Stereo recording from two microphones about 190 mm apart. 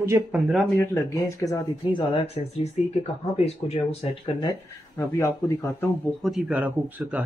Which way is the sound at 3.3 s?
35° left (ahead or behind).